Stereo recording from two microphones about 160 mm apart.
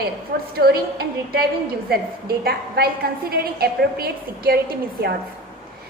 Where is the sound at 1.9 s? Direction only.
75° right (ahead or behind).